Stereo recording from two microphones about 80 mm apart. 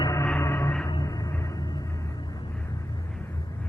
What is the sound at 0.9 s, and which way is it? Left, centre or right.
Music, left.